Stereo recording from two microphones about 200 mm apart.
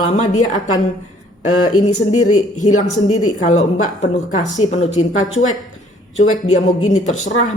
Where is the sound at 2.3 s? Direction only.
35° left (ahead or behind).